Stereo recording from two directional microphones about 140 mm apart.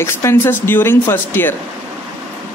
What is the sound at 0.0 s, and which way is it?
Speech, 20° left (ahead or behind).